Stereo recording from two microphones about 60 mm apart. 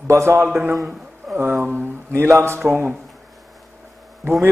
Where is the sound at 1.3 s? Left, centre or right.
Right.